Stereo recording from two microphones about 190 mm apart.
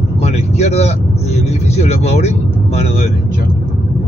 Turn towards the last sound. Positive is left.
turn(degrees=35)  # may be behind; listen again after turning